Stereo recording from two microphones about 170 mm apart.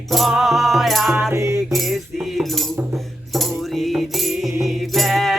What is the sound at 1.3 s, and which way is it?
Music, 15° right (ahead or behind).